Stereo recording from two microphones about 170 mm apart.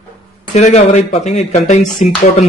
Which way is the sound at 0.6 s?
45° left (ahead or behind).